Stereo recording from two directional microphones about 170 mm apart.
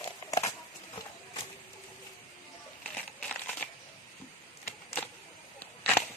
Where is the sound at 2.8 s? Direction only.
5° left (ahead or behind).